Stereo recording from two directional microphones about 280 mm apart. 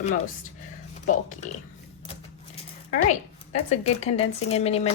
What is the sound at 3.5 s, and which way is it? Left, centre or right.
Speech, left.